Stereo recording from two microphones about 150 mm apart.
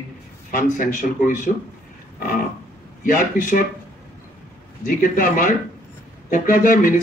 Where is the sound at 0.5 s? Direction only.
60° left (ahead or behind).